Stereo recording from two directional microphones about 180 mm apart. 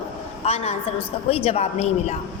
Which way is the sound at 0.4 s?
35° left (ahead or behind).